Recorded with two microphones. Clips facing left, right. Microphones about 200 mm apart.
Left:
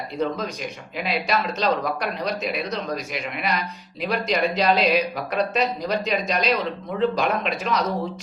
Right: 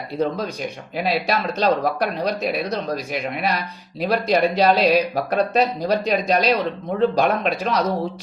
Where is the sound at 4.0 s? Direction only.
35° right (ahead or behind).